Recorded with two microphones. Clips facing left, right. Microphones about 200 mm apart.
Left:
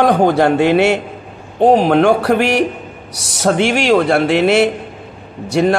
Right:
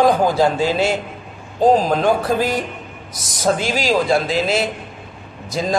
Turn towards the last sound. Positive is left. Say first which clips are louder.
# left 9 dB
turn(degrees=70)  # may be behind; listen again after turning